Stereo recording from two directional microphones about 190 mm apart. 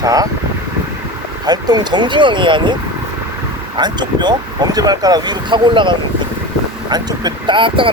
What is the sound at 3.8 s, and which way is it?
Speech, 20° right (ahead or behind).